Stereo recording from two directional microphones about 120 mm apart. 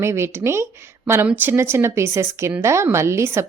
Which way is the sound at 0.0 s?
20° right (ahead or behind).